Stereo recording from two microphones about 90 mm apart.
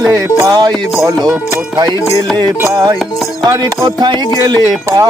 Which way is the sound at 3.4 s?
40° right (ahead or behind).